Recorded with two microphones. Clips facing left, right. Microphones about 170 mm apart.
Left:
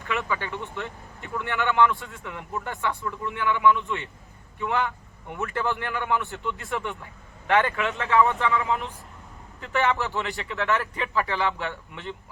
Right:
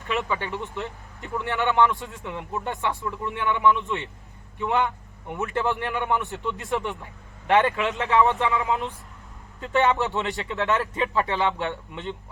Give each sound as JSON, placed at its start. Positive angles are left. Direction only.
{"t": 0.1, "sound": "speech", "side_deg": -25}
{"t": 9.7, "sound": "speech", "side_deg": -20}